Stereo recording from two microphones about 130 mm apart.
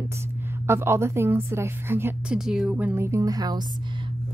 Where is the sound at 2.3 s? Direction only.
5° right (ahead or behind); by 3.6 s 30° right (ahead or behind).